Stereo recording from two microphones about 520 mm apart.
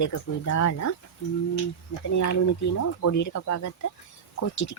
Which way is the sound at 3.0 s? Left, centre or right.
Left.